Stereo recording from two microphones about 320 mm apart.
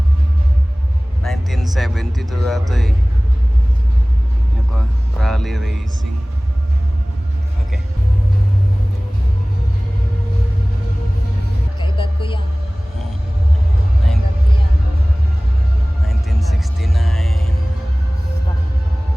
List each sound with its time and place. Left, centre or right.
1.2 s speech: centre
5.2 s music: centre
11.8 s a sound: centre
16.0 s music: centre